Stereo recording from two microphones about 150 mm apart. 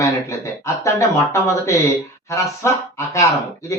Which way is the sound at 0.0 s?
20° left (ahead or behind).